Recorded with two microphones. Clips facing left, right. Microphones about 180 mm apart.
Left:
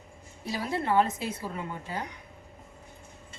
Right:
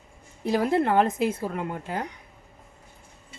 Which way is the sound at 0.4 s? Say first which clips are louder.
Right 8 dB; 55° right (ahead or behind).